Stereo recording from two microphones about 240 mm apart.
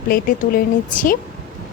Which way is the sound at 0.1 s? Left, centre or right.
Left.